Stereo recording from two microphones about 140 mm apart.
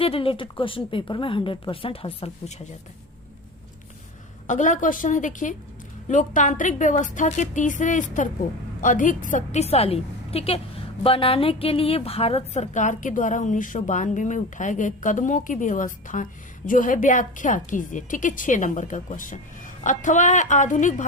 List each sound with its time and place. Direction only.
0.0 s a woman's voice: 40° left (ahead or behind)
4.4 s a woman's voice: 65° left (ahead or behind)